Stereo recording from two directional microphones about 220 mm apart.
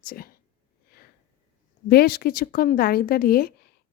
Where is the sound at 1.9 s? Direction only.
45° left (ahead or behind).